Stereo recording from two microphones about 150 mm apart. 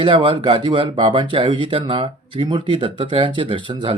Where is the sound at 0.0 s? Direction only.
35° right (ahead or behind).